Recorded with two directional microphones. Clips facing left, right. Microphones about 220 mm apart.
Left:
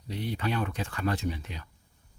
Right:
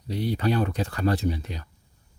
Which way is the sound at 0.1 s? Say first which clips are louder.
Right 6 dB; 35° right (ahead or behind).